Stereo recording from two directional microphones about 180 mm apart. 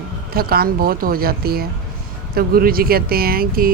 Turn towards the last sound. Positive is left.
turn(degrees=-55)  # may be behind; listen again after turning